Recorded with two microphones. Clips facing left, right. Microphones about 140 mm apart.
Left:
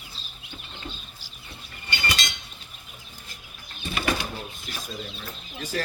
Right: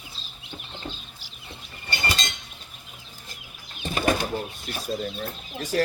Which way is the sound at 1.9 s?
35° right (ahead or behind).